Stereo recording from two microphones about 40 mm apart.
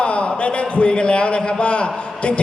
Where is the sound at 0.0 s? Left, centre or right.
Left.